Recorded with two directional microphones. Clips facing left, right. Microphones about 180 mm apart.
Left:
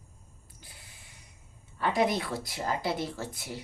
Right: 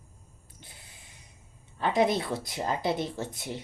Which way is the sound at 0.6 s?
25° right (ahead or behind).